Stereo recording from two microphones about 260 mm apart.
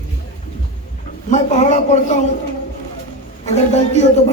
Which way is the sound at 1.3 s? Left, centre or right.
Left.